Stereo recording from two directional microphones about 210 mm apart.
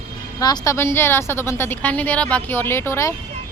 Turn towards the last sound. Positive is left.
turn(degrees=10)  # may be behind; listen again after turning